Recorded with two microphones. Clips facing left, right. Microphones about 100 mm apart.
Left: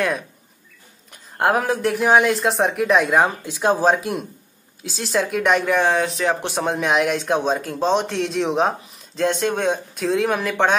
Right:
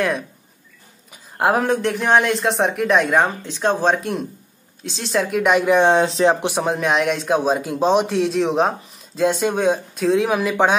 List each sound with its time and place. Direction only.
1.1 s speech: centre (ahead or behind)
5.7 s speech: 25° right (ahead or behind)
6.6 s speech: centre (ahead or behind)